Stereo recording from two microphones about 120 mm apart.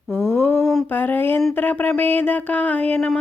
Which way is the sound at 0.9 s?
15° left (ahead or behind).